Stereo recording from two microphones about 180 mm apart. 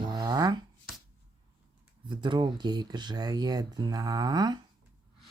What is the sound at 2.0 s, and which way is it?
Speech, 25° right (ahead or behind).